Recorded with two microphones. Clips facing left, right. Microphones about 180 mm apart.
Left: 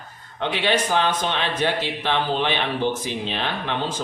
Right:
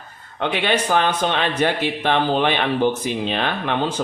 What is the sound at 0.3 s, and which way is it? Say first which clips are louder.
A man's voice: right 2 dB; 60° right (ahead or behind).